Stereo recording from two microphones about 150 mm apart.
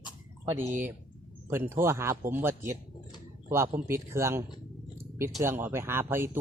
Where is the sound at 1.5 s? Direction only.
15° right (ahead or behind).